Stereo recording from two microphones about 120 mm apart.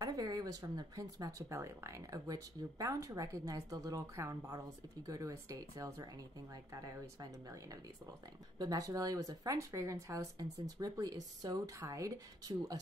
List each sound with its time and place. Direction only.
0.0 s speech: 30° right (ahead or behind)